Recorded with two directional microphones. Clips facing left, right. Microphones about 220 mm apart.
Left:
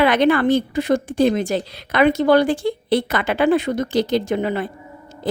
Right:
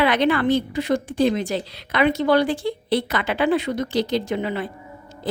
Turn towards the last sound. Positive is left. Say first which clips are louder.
# left 3 dB
turn(degrees=50)  # may be behind; listen again after turning